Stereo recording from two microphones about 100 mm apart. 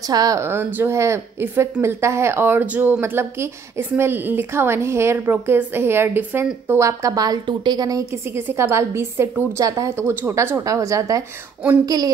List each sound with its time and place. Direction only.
0.1 s a woman's voice: 35° right (ahead or behind)
0.5 s a woman's voice: 25° right (ahead or behind)
3.0 s a woman's voice: 25° right (ahead or behind)
6.9 s a woman's voice: 35° right (ahead or behind)
8.4 s a woman's voice: 25° right (ahead or behind)
9.8 s a woman's voice: 25° right (ahead or behind); by 12.1 s 40° right (ahead or behind)